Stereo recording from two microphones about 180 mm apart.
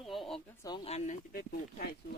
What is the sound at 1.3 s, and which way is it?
Speech, 60° left (ahead or behind).